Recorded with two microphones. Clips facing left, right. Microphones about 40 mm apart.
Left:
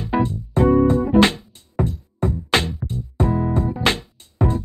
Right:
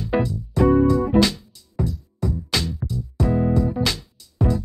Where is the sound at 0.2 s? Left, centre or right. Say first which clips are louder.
Left 3 dB; left.